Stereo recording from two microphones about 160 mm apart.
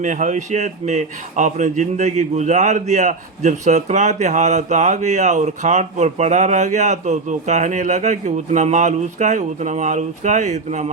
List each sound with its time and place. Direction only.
0.0 s speech: 50° right (ahead or behind)